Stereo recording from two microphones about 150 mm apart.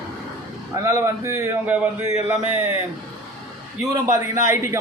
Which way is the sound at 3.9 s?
20° right (ahead or behind).